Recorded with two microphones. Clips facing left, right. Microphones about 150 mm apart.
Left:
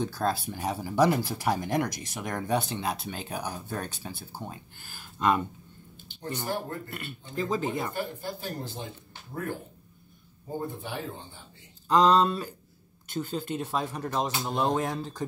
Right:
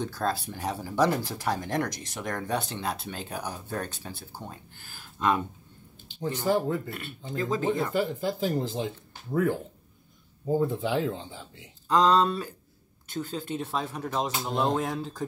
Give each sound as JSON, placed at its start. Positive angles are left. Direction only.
{"t": 0.0, "sound": "speech", "side_deg": 5}
{"t": 6.0, "sound": "speech", "side_deg": -90}
{"t": 7.4, "sound": "speech", "side_deg": 5}
{"t": 7.9, "sound": "speech", "side_deg": -90}
{"t": 11.9, "sound": "speech", "side_deg": 0}